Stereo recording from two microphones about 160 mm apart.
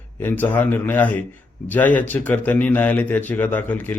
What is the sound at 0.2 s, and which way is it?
A man's voice, 10° left (ahead or behind).